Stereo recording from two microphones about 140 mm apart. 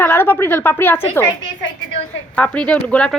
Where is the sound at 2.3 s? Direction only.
10° left (ahead or behind).